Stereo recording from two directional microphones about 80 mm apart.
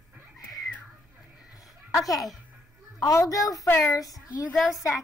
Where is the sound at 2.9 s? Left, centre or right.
Left.